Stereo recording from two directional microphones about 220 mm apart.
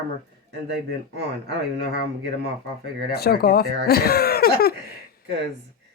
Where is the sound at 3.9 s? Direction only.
45° left (ahead or behind).